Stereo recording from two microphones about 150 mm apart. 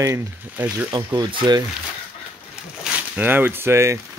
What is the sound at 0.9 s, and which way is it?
Speech, 30° right (ahead or behind).